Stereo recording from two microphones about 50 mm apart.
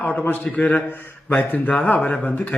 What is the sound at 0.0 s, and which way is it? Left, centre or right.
Speech, left.